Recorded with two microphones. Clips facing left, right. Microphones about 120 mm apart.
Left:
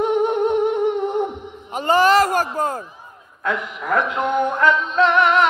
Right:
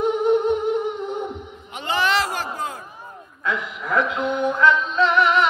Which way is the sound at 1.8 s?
40° left (ahead or behind).